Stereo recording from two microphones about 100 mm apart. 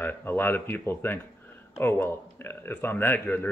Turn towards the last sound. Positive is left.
turn(degrees=20)  # may be behind; listen again after turning